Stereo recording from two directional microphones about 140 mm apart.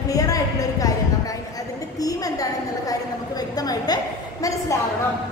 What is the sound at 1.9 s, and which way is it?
A woman's voice, 25° left (ahead or behind).